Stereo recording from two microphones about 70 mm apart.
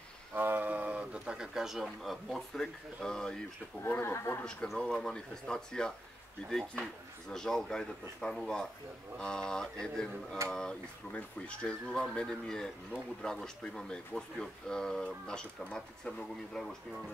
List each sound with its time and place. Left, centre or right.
0.3 s a sound: right; by 3.3 s centre
4.0 s speech: left
4.7 s speech: centre